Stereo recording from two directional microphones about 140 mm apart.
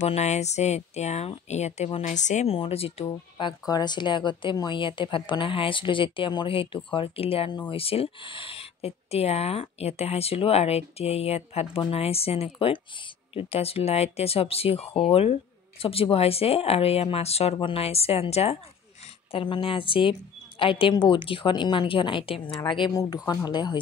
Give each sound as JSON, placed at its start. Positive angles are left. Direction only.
{"t": 0.0, "sound": "a woman's voice", "side_deg": 50}
{"t": 19.3, "sound": "speech", "side_deg": 35}